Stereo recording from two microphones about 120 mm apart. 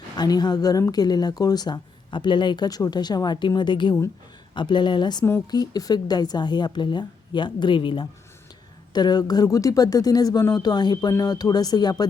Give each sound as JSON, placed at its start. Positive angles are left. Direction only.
{"t": 0.2, "sound": "a woman's voice", "side_deg": 35}